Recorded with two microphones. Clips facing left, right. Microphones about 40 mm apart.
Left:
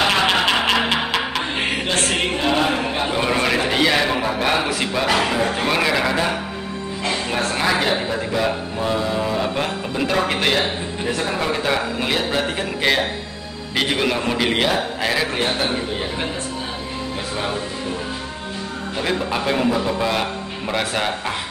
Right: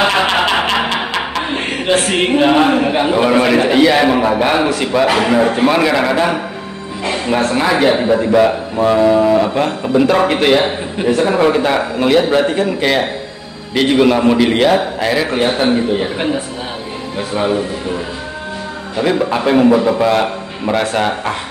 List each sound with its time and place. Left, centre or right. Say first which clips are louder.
0.0 s a sound: right 4 dB; centre
0.8 s a sound: right 3 dB; centre
2.1 s a man's voice: right 10 dB; right; by 4.0 s centre
4.0 s a man's voice: right 8 dB; right
7.1 s a sound: right 7 dB; centre
7.4 s a man's voice: right 6 dB; centre
8.7 s a sound: right 14 dB; right
9.4 s a man's voice: right 7 dB; centre
11.1 s a man's voice: right 11 dB; centre
15.4 s a man's voice: right 8 dB; centre
19.3 s a man's voice: right 10 dB; centre
20.7 s a man's voice: right 7 dB; centre